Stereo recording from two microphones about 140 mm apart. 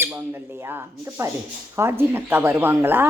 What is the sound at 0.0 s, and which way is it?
Speech, 20° right (ahead or behind).